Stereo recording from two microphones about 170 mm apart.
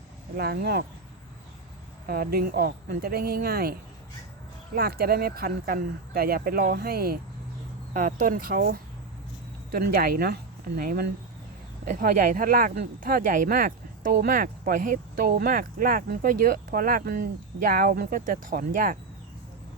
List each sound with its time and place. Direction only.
0.3 s speech: 70° right (ahead or behind)
2.0 s speech: 60° right (ahead or behind)
7.9 s speech: 55° right (ahead or behind)
15.3 s speech: 65° right (ahead or behind)